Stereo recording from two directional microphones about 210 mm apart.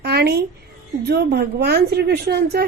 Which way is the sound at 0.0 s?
50° right (ahead or behind).